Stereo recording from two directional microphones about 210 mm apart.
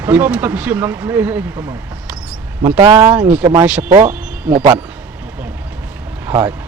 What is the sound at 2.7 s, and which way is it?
Speech, 20° right (ahead or behind).